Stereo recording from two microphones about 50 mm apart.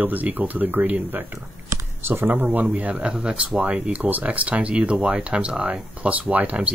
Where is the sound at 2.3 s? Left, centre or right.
Right.